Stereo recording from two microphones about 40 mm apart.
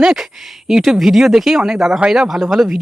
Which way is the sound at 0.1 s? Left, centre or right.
Centre.